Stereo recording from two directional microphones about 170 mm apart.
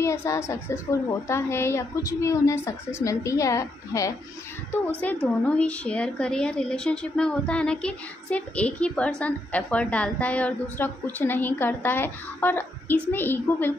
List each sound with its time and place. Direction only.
0.0 s speech: 15° left (ahead or behind)